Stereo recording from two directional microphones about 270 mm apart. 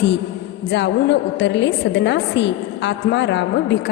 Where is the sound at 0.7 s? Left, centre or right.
Left.